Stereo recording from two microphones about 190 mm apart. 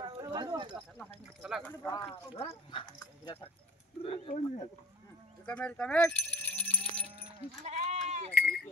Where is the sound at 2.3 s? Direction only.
30° left (ahead or behind).